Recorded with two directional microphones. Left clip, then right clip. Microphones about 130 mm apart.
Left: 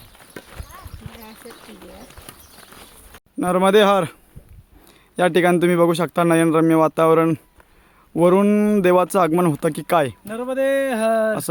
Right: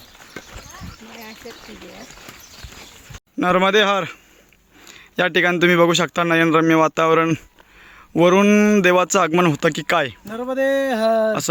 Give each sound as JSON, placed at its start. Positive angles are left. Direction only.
{"t": 3.3, "sound": "a man's voice", "side_deg": 10}
{"t": 8.1, "sound": "speech", "side_deg": -10}
{"t": 10.2, "sound": "a man's voice", "side_deg": 20}
{"t": 10.5, "sound": "a sound", "side_deg": 55}